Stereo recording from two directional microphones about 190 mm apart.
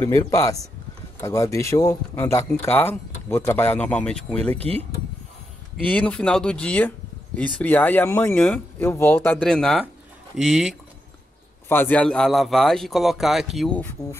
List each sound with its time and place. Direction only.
0.0 s speech: 15° left (ahead or behind)
5.9 s speech: 5° left (ahead or behind)